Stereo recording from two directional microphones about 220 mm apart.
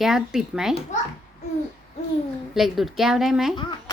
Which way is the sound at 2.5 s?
Centre (ahead or behind).